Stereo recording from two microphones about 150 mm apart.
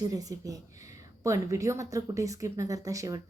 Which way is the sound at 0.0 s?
25° right (ahead or behind).